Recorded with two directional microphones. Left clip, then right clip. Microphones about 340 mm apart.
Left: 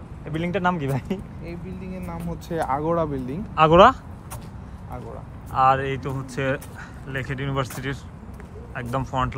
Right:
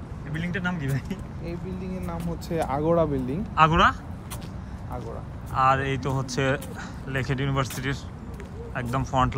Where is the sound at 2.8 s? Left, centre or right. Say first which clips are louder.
Right 1 dB; centre.